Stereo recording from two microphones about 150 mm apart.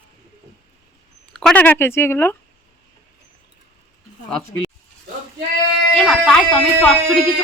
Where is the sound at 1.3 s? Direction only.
5° left (ahead or behind).